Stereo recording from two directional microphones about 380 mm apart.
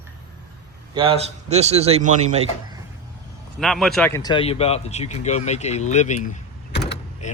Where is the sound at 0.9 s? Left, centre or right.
Centre.